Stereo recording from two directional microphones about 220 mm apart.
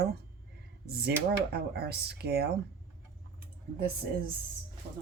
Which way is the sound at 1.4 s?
45° right (ahead or behind).